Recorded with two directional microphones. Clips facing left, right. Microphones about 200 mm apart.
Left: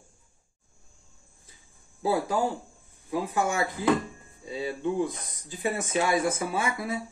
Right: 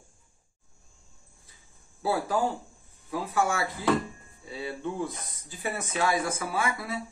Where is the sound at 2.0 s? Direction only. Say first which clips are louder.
Left 1 dB; 15° left (ahead or behind).